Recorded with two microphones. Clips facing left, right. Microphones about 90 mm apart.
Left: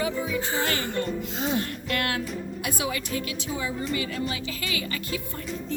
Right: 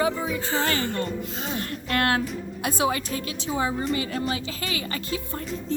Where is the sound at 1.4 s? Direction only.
20° left (ahead or behind).